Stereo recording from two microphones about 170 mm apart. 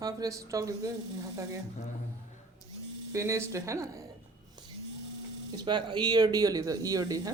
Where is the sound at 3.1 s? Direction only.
20° right (ahead or behind).